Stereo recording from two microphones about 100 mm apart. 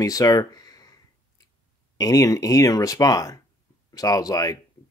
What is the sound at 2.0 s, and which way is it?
Speech, 35° left (ahead or behind).